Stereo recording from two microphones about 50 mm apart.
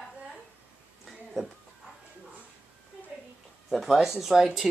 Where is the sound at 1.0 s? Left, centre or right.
Centre.